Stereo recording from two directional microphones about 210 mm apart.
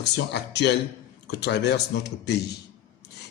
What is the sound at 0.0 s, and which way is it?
A man's voice, 55° left (ahead or behind).